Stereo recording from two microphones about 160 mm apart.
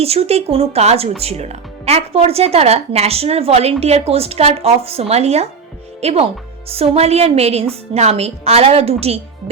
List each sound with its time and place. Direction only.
0.0 s speech: 40° right (ahead or behind)